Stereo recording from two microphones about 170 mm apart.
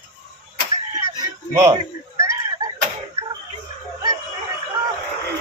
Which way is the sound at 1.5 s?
20° right (ahead or behind).